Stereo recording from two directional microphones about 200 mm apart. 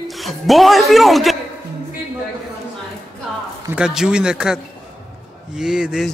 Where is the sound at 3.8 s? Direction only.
5° right (ahead or behind).